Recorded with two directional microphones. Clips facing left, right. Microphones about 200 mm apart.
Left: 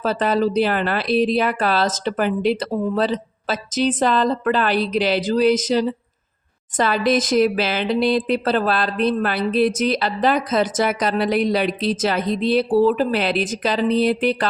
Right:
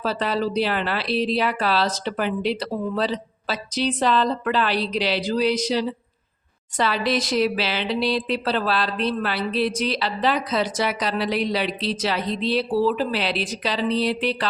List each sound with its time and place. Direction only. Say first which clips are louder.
0.0 s speech: left 5 dB; 50° left (ahead or behind)